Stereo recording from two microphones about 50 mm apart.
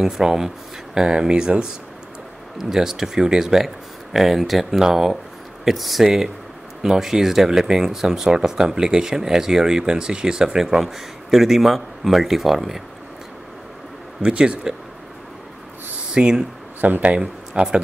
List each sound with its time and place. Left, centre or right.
0.0 s speech: centre
14.2 s speech: centre
16.1 s speech: centre
16.8 s speech: right